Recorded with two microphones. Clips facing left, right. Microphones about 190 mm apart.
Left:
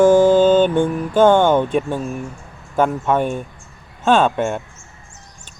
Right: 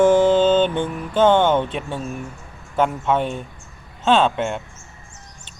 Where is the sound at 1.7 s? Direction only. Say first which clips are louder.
Left 9 dB; 50° left (ahead or behind).